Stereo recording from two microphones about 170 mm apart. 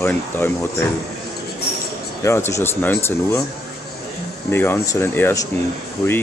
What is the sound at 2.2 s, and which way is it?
Speech, 15° left (ahead or behind).